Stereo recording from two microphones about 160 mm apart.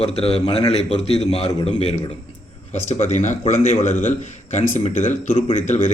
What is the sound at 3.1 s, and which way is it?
Speech, 50° left (ahead or behind).